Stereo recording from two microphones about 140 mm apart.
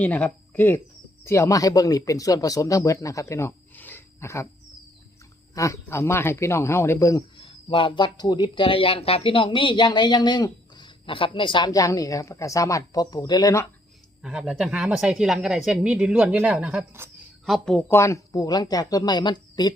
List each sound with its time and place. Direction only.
0.0 s speech: 10° left (ahead or behind)
5.5 s a woman's voice: 20° left (ahead or behind)
7.3 s speech: 40° left (ahead or behind)
14.2 s speech: 5° right (ahead or behind)
17.0 s speech: 15° right (ahead or behind)
17.4 s speech: 5° left (ahead or behind)
17.9 s a woman's voice: 20° left (ahead or behind)